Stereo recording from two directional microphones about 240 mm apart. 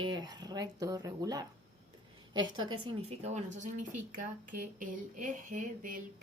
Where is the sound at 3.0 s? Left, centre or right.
Right.